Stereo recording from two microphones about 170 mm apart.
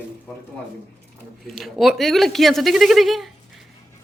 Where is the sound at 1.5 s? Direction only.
Centre (ahead or behind).